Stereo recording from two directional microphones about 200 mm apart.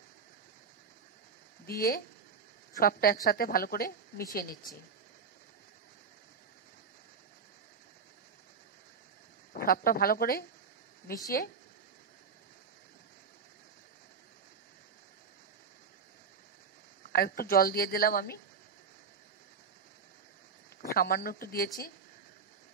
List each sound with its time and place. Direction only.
1.7 s a woman's voice: 50° left (ahead or behind)
9.5 s speech: 45° left (ahead or behind)
17.0 s a woman's voice: 50° left (ahead or behind)
20.9 s a woman's voice: 50° left (ahead or behind)